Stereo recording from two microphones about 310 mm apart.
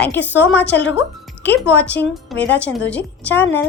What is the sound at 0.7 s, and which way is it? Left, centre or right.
Speech, left.